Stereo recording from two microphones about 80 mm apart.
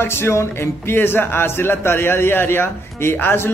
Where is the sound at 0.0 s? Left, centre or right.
Left.